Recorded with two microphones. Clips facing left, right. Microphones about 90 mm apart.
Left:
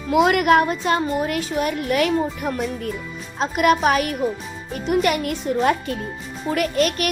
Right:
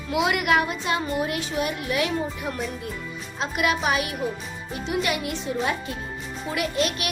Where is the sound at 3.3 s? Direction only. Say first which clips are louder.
Left 7 dB; 40° left (ahead or behind).